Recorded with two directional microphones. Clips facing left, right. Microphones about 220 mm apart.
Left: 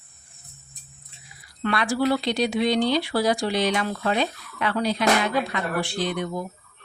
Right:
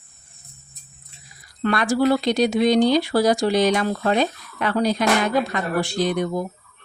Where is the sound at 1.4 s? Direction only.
45° right (ahead or behind).